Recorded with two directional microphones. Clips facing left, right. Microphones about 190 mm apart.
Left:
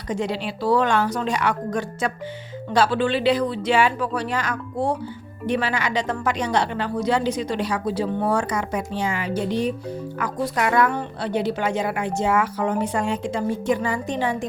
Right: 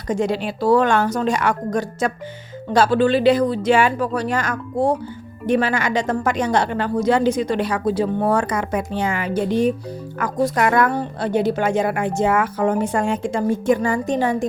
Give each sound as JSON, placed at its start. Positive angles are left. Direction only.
{"t": 0.1, "sound": "speech", "side_deg": -45}